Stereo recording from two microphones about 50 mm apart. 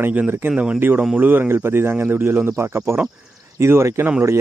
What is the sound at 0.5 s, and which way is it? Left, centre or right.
Speech, centre.